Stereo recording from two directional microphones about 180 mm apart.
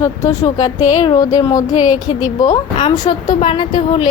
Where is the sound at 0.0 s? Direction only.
15° left (ahead or behind).